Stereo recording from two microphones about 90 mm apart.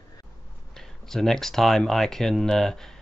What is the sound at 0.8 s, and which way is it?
Speech, 5° left (ahead or behind).